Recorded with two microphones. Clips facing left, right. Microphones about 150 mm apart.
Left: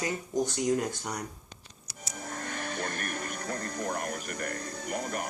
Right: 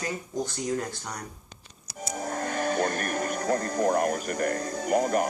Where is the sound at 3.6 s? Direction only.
45° right (ahead or behind).